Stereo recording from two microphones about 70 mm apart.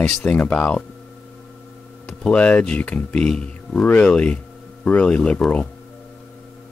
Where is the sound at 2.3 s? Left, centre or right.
Centre.